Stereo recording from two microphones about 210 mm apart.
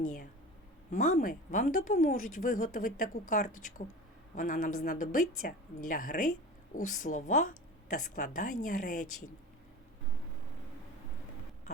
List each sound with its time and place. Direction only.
0.9 s speech: 40° left (ahead or behind)